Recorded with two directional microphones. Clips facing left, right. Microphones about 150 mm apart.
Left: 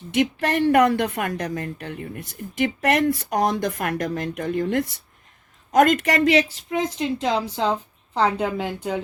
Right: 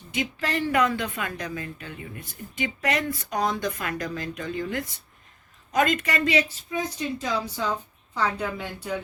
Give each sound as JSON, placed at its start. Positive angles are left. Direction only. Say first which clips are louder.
{"t": 0.1, "sound": "speech", "louder": "left 7 dB", "side_deg": 70}